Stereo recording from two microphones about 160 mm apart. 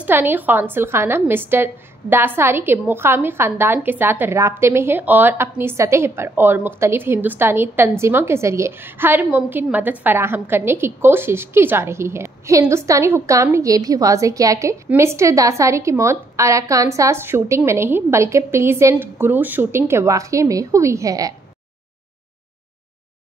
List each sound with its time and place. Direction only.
0.0 s a woman's voice: 10° right (ahead or behind)